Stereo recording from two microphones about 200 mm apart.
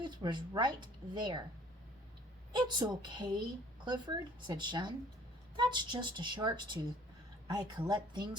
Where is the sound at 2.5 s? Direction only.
20° right (ahead or behind).